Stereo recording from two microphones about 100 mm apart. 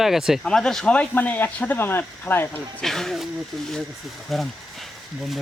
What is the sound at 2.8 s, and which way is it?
Speech, 5° left (ahead or behind).